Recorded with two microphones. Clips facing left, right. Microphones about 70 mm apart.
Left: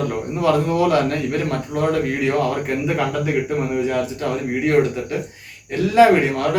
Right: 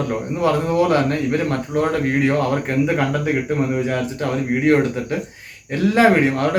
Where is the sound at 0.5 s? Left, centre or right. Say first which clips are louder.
Even; right.